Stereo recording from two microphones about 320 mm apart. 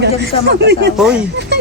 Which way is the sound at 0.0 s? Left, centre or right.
Right.